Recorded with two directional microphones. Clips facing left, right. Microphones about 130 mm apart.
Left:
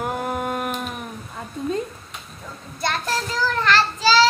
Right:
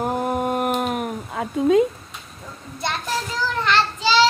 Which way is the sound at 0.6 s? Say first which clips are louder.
Right 6 dB; 55° right (ahead or behind).